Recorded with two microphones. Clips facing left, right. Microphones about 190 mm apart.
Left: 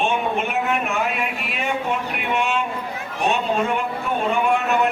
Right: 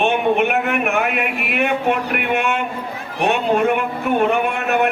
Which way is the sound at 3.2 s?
60° right (ahead or behind).